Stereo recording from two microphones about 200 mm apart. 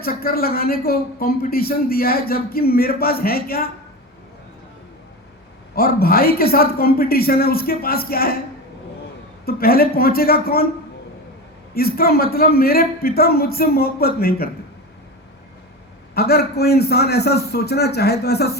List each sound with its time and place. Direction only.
0.0 s speech: 45° left (ahead or behind)
5.7 s speech: 50° left (ahead or behind)
9.5 s speech: 50° left (ahead or behind)
11.7 s speech: 50° left (ahead or behind)
16.1 s speech: 50° left (ahead or behind)